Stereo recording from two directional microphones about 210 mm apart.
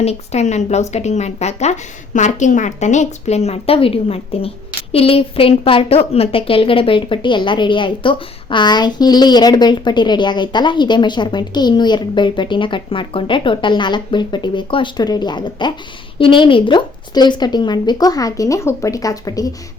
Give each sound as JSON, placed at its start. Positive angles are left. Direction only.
{"t": 0.0, "sound": "a woman's voice", "side_deg": 30}